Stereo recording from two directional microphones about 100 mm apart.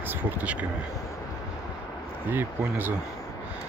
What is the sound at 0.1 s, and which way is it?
Speech, 15° right (ahead or behind).